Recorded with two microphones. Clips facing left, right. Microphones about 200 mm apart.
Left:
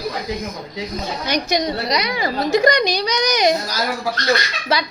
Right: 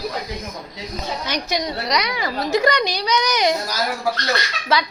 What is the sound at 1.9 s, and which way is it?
Speech, 30° left (ahead or behind).